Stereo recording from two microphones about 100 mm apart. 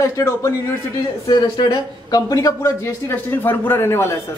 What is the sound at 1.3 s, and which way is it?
A man's voice, 45° left (ahead or behind).